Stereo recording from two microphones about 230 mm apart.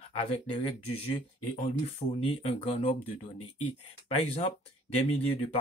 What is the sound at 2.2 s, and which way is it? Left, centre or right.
Speech, left.